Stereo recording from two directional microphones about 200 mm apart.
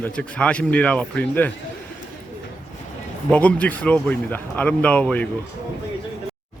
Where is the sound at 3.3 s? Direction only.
5° left (ahead or behind).